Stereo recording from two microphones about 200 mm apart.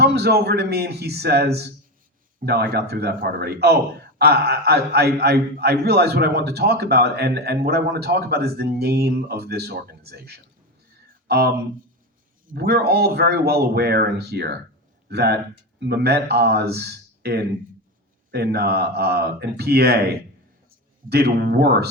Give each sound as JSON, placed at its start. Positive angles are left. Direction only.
{"t": 0.0, "sound": "a man's voice", "side_deg": -55}